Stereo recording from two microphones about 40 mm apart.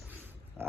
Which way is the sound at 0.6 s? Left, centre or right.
Right.